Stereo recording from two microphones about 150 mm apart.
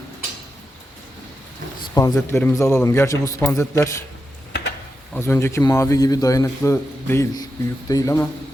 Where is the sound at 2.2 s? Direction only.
15° left (ahead or behind).